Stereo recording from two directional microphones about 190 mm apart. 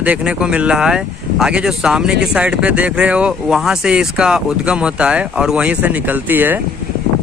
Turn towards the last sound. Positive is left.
turn(degrees=-10)  # may be behind; listen again after turning